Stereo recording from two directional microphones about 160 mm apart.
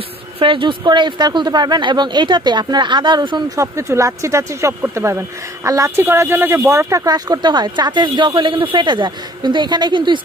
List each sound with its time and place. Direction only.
0.4 s speech: 30° right (ahead or behind)